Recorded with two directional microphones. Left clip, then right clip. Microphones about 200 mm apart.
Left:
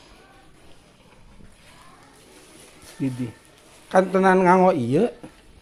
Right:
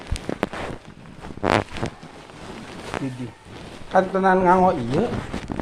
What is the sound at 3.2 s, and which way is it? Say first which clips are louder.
Speech: even; 55° left (ahead or behind).